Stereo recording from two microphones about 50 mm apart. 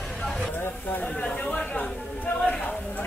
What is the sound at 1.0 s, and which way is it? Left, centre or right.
Speech, centre.